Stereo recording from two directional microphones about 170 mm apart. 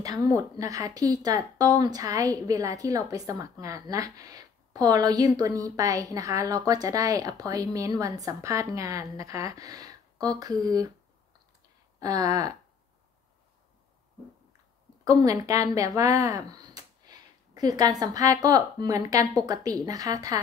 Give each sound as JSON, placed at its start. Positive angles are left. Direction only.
{"t": 0.0, "sound": "a woman's voice", "side_deg": -20}
{"t": 12.0, "sound": "a woman's voice", "side_deg": -20}
{"t": 15.0, "sound": "a woman's voice", "side_deg": -20}